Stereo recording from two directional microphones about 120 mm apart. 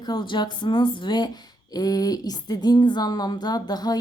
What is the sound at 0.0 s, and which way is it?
Speech, 40° left (ahead or behind).